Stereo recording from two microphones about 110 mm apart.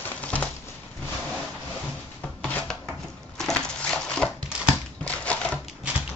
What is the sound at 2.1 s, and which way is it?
Rub, 15° left (ahead or behind).